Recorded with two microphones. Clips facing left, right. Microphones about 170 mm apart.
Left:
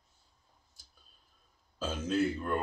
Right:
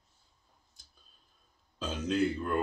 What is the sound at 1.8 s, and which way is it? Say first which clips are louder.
Speech: right 1 dB; 5° left (ahead or behind).